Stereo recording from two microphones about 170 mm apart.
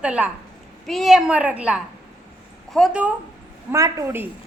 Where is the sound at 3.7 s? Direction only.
20° right (ahead or behind).